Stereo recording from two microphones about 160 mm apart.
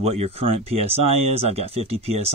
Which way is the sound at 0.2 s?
40° right (ahead or behind).